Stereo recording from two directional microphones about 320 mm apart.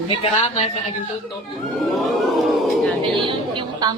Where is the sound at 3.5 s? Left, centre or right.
Centre.